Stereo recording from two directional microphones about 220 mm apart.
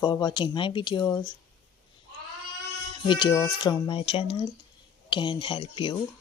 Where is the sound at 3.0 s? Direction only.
20° left (ahead or behind).